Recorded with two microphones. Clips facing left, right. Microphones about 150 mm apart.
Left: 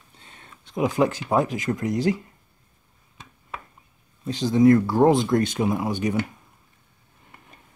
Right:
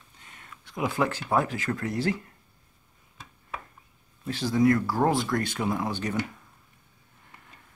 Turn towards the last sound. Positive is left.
turn(degrees=15)  # may be behind; listen again after turning